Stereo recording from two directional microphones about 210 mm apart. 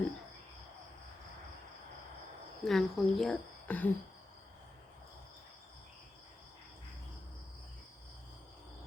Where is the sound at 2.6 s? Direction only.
Centre (ahead or behind).